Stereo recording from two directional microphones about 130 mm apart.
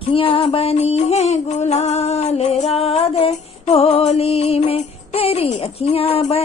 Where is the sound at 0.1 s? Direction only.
45° left (ahead or behind).